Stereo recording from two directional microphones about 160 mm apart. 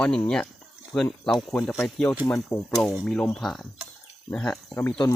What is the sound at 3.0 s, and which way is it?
Speech, 5° left (ahead or behind).